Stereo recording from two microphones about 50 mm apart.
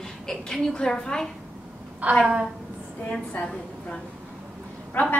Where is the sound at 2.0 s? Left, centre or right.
Right.